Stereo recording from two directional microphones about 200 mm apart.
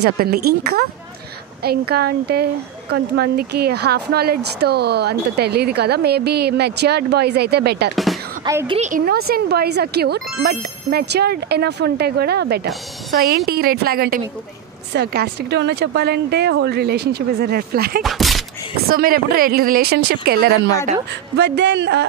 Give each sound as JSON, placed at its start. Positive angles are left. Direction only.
{"t": 0.0, "sound": "speech", "side_deg": -50}
{"t": 7.9, "sound": "music", "side_deg": 0}
{"t": 8.5, "sound": "a woman's voice", "side_deg": -15}
{"t": 8.7, "sound": "a woman's voice", "side_deg": -40}
{"t": 18.0, "sound": "speech", "side_deg": 0}
{"t": 18.8, "sound": "a woman's voice", "side_deg": -50}